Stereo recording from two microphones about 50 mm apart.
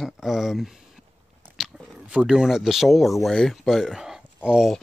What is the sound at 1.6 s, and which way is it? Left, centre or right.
Chewing, centre.